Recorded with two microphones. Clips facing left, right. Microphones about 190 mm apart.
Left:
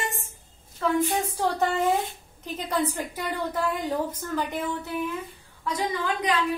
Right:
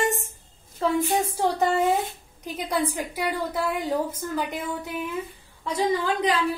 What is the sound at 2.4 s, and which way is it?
A woman's voice, 10° right (ahead or behind).